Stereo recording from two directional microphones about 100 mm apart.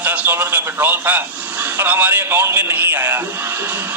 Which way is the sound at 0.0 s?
20° right (ahead or behind).